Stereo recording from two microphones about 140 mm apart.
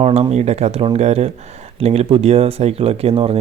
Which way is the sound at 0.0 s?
45° right (ahead or behind).